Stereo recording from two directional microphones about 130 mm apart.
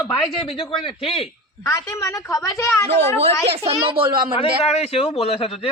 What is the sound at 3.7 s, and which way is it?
Speech, 40° right (ahead or behind).